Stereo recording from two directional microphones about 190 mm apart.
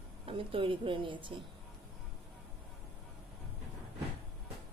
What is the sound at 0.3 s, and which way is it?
A woman's voice, 30° right (ahead or behind).